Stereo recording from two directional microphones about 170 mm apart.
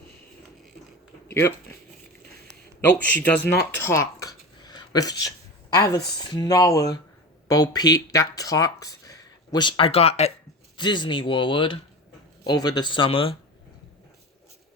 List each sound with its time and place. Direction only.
1.3 s speech: 15° left (ahead or behind)
3.0 s speech: 10° left (ahead or behind); by 10.3 s 40° left (ahead or behind)
10.8 s speech: 25° left (ahead or behind)